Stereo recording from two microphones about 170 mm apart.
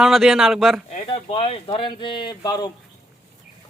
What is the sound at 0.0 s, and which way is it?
Speech, centre (ahead or behind).